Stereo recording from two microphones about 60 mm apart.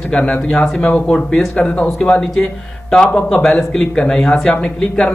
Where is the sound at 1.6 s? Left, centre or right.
Left.